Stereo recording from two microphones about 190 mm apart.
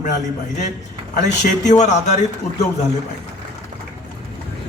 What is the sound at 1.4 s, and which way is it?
Speech, 40° left (ahead or behind).